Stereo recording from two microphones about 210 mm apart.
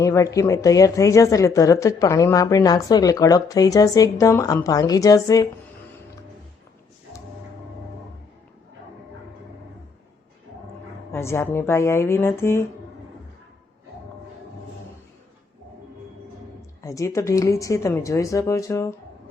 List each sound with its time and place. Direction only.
0.0 s a woman's voice: 15° left (ahead or behind)
11.1 s a woman's voice: 10° left (ahead or behind)
16.8 s a woman's voice: 15° left (ahead or behind)